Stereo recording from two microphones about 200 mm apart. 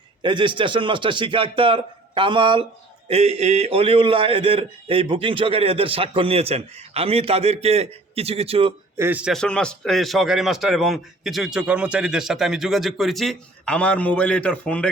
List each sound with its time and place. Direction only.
0.2 s a man's voice: 25° right (ahead or behind)
9.0 s a man's voice: 10° right (ahead or behind)